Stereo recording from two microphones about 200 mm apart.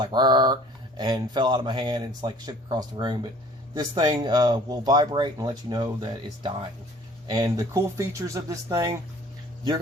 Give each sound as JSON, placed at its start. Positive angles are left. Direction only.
{"t": 0.0, "sound": "speech", "side_deg": -20}